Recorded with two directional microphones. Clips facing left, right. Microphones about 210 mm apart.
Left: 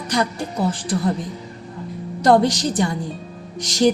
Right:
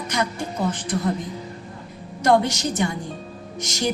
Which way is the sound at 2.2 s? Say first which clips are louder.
Left 3 dB; 35° left (ahead or behind).